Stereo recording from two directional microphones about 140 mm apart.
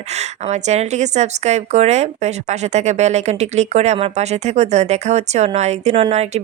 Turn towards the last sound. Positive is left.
turn(degrees=-50)  # may be behind; listen again after turning